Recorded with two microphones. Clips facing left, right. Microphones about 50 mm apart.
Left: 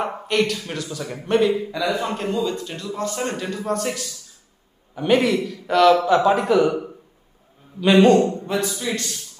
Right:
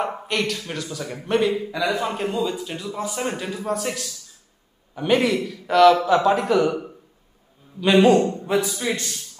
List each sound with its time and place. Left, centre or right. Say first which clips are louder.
0.0 s a man's voice: left 3 dB; centre
8.7 s a man's voice: right 1 dB; right